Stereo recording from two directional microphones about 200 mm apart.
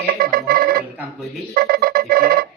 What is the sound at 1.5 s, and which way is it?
Ringtone, 50° right (ahead or behind).